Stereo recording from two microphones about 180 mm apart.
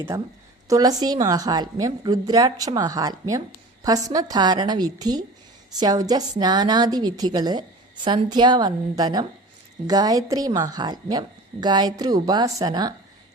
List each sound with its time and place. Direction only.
0.1 s a woman's voice: 15° right (ahead or behind)